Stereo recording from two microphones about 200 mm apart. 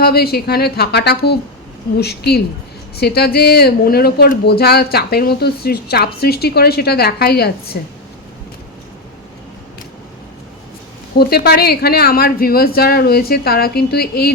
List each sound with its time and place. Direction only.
0.0 s speech: 50° left (ahead or behind)
11.2 s speech: 50° left (ahead or behind)